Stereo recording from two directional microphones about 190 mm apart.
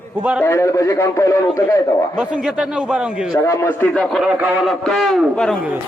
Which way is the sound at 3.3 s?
15° left (ahead or behind).